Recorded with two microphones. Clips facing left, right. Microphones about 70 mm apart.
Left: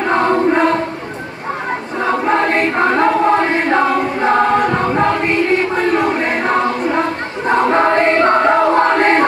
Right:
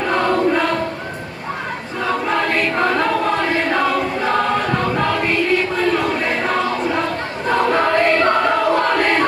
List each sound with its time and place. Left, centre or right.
0.0 s choir: left
2.0 s choir: left